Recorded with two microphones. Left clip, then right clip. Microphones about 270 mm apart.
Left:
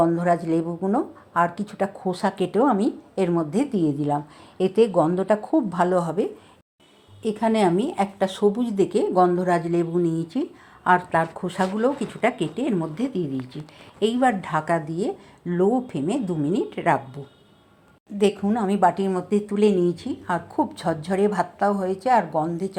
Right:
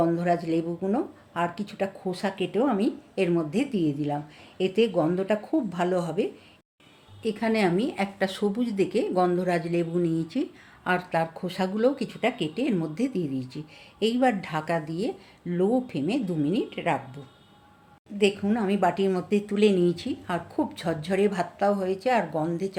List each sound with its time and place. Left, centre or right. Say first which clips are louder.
0.0 s speech: left 4 dB; centre
18.4 s speech: left 4 dB; centre